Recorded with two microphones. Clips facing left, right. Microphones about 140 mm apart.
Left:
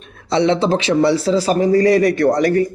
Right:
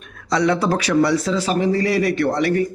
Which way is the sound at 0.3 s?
25° left (ahead or behind).